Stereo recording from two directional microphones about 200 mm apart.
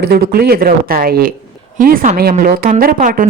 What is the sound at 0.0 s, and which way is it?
Speech, 50° right (ahead or behind).